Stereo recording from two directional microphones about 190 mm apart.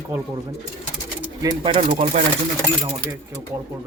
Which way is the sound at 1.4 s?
30° right (ahead or behind).